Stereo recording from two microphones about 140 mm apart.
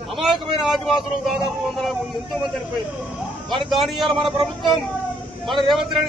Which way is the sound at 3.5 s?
Centre (ahead or behind).